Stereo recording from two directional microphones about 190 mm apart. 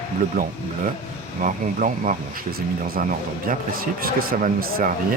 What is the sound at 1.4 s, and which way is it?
Speech, 45° right (ahead or behind).